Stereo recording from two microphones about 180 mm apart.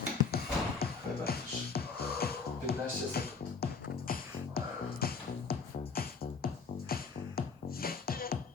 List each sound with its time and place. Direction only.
0.3 s music: 60° left (ahead or behind)